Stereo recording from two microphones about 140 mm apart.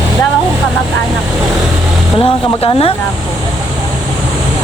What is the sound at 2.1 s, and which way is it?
Speech, 40° left (ahead or behind).